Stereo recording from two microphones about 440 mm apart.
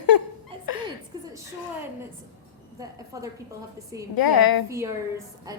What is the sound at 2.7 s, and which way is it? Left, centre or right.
Speech, centre.